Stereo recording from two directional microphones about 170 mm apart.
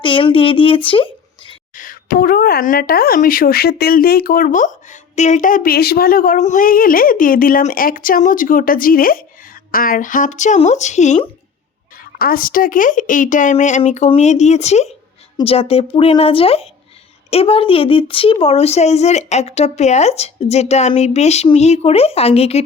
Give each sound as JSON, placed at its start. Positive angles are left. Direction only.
{"t": 0.0, "sound": "a woman's voice", "side_deg": 30}
{"t": 1.7, "sound": "a woman's voice", "side_deg": 55}
{"t": 11.9, "sound": "a woman's voice", "side_deg": 55}